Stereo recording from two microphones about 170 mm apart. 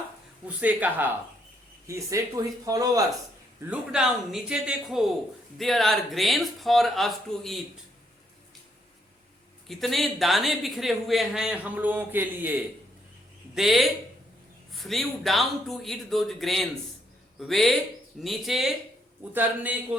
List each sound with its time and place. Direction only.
0.4 s speech: 10° right (ahead or behind)
3.7 s speech: 5° right (ahead or behind)
9.6 s speech: centre (ahead or behind)
13.6 s speech: centre (ahead or behind)